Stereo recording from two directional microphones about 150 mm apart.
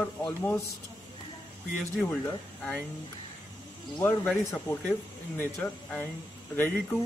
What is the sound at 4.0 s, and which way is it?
Speech, 10° left (ahead or behind).